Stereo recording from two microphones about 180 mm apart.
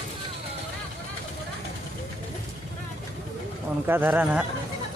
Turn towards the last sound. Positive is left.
turn(degrees=-5)  # may be behind; listen again after turning